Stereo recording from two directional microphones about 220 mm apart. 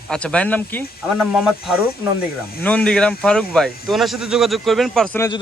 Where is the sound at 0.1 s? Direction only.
5° left (ahead or behind).